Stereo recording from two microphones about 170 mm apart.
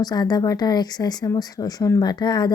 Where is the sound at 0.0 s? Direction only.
25° left (ahead or behind).